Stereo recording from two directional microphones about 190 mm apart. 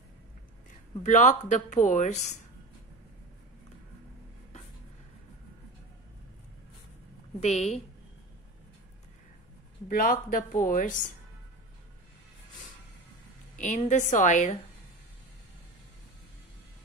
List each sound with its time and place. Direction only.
0.7 s a sound: 40° left (ahead or behind)
1.5 s a woman's voice: 40° left (ahead or behind)
7.3 s a woman's voice: 35° left (ahead or behind)
9.8 s speech: 50° left (ahead or behind)
13.6 s a woman's voice: 40° left (ahead or behind)